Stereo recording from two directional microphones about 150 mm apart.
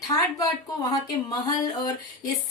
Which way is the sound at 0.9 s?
25° left (ahead or behind).